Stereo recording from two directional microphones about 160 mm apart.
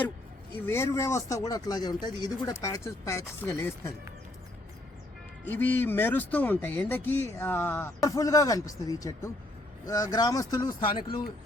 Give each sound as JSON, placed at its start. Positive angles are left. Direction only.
{"t": 0.6, "sound": "speech", "side_deg": 15}
{"t": 5.5, "sound": "speech", "side_deg": 10}